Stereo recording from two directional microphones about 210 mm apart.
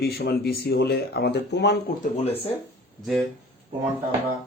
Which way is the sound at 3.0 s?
Centre (ahead or behind).